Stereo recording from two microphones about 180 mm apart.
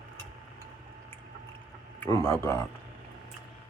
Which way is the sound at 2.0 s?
15° left (ahead or behind).